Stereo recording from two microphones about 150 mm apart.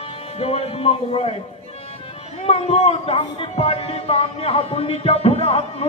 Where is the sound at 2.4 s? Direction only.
45° left (ahead or behind).